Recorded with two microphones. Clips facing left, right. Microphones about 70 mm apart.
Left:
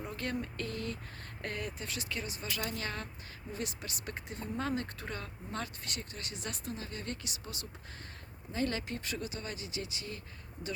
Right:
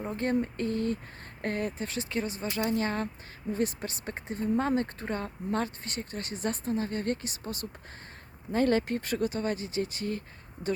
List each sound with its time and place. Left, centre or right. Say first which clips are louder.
0.0 s speech: right 9 dB; right